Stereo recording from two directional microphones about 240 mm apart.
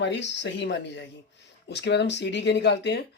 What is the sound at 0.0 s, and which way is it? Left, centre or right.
Speech, left.